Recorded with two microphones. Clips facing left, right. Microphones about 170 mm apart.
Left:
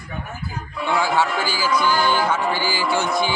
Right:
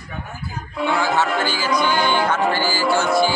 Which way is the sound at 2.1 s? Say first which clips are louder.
Right 2 dB; 5° left (ahead or behind).